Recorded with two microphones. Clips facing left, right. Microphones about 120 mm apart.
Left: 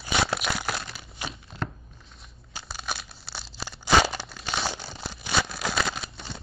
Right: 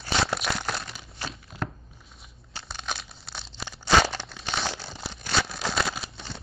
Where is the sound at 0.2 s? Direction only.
Centre (ahead or behind).